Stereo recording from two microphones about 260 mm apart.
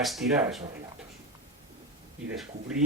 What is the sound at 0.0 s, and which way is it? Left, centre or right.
Speech, centre.